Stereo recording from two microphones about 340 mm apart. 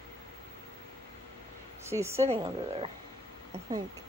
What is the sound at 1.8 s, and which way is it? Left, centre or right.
A woman's voice, centre.